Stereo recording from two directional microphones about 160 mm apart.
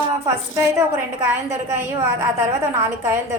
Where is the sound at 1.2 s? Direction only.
15° right (ahead or behind).